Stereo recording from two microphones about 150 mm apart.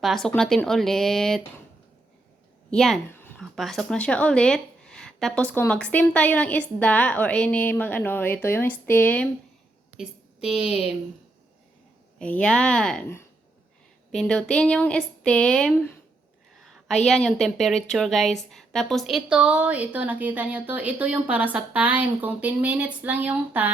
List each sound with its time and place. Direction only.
0.0 s speech: centre (ahead or behind)
2.6 s a woman's voice: centre (ahead or behind)
3.1 s a sound: 15° left (ahead or behind)
3.4 s speech: centre (ahead or behind)
10.0 s a woman's voice: 5° right (ahead or behind)
12.2 s speech: 5° left (ahead or behind)
14.1 s speech: 5° left (ahead or behind)
16.6 s a sound: centre (ahead or behind)
17.1 s a woman's voice: 5° left (ahead or behind)